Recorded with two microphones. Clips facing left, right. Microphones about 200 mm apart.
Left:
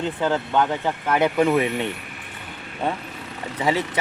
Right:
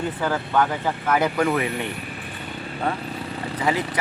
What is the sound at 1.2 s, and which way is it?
Speech, 20° left (ahead or behind).